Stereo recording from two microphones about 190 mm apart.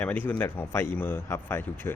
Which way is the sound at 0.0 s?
10° left (ahead or behind).